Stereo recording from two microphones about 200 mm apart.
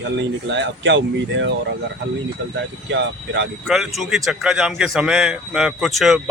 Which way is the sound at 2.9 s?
65° right (ahead or behind).